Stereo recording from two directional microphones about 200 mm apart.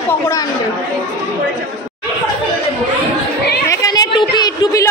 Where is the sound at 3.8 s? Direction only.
20° left (ahead or behind).